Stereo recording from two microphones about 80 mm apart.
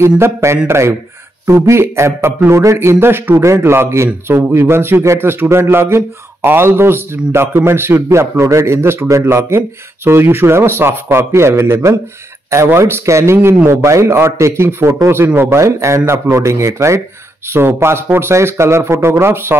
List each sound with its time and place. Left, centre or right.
0.0 s a man's voice: right